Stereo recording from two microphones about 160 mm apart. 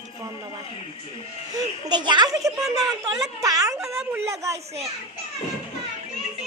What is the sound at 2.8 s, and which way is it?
Speech, centre (ahead or behind).